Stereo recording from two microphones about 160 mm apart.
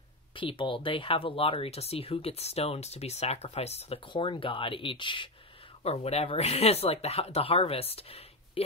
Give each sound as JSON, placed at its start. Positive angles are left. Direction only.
{"t": 0.4, "sound": "speech", "side_deg": 30}